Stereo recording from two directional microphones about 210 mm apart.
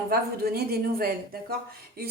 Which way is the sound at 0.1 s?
45° right (ahead or behind).